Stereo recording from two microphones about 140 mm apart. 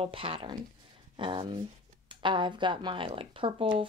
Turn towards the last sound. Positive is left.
turn(degrees=-35)  # may be behind; listen again after turning